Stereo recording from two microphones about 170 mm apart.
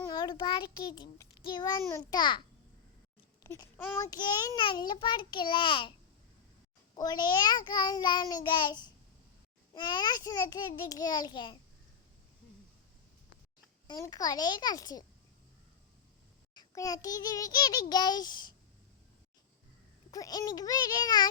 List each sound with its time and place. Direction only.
0.0 s a child's voice: 25° left (ahead or behind)
3.4 s a child's voice: 20° left (ahead or behind)
6.9 s a child's voice: 25° left (ahead or behind)
13.8 s a child's voice: 25° left (ahead or behind)
16.6 s a child's voice: 20° left (ahead or behind)
20.1 s a child's voice: 20° left (ahead or behind)